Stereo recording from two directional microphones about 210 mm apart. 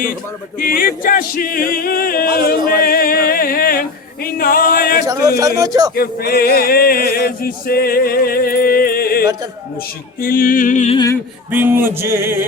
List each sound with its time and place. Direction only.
0.6 s a capella: 45° left (ahead or behind)
5.4 s music: 15° right (ahead or behind)
5.9 s a capella: 45° left (ahead or behind)
10.2 s music: 45° left (ahead or behind)
10.9 s a sound: 15° left (ahead or behind)
11.5 s music: 10° right (ahead or behind)